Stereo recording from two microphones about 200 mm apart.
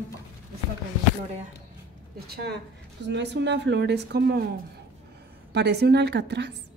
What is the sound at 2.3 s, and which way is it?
A woman's voice, 55° right (ahead or behind).